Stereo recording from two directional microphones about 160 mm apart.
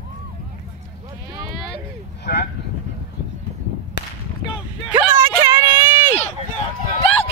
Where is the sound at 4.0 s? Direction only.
90° left.